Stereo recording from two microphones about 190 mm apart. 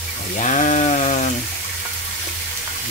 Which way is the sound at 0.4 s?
40° left (ahead or behind).